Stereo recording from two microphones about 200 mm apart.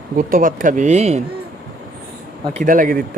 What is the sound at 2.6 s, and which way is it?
Speech, 40° right (ahead or behind).